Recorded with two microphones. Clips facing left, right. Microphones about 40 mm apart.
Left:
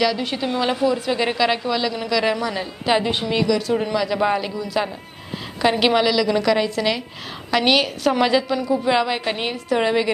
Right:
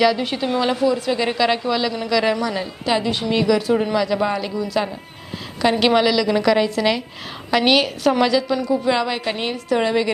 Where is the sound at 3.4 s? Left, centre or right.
Centre.